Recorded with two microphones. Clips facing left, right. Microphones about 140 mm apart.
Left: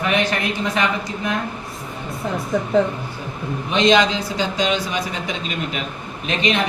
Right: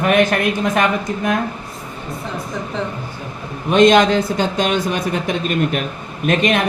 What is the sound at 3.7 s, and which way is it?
Speech, 50° right (ahead or behind).